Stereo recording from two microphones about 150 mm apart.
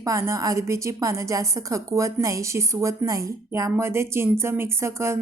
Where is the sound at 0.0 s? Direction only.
20° right (ahead or behind).